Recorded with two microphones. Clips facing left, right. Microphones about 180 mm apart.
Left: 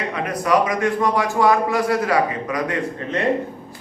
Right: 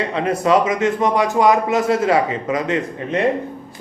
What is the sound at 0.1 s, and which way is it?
A man's voice, 25° right (ahead or behind).